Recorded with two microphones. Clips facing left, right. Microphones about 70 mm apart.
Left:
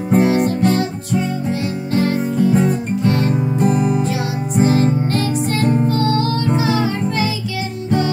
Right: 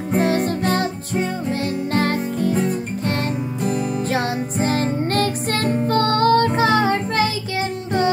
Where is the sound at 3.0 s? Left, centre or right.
Right.